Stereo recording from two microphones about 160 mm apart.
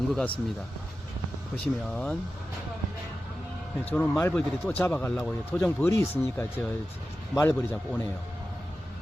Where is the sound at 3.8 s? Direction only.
5° left (ahead or behind).